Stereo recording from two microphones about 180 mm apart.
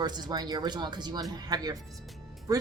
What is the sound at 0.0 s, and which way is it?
Speech, 25° right (ahead or behind).